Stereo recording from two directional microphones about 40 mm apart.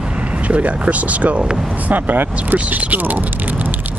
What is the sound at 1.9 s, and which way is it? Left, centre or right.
Speech, right.